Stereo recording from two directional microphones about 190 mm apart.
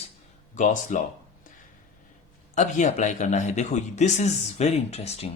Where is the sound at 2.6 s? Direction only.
40° left (ahead or behind).